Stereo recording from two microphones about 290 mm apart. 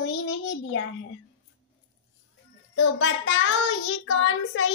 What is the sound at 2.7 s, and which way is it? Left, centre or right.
Child singing, left.